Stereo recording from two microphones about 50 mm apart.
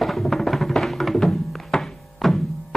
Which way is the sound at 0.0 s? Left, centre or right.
Centre.